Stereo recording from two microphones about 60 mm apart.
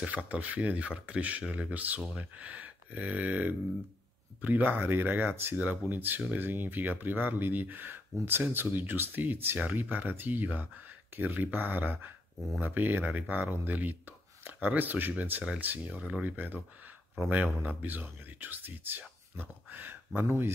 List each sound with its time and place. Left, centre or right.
0.0 s speech: right
16.0 s speech: centre
16.3 s speech: right